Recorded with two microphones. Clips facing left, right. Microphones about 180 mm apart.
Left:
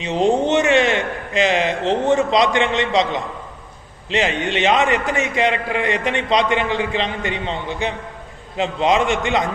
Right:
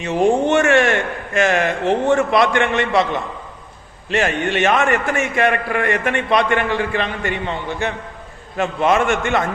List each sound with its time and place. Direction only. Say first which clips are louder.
0.0 s a man's voice: right 1 dB; 20° left (ahead or behind)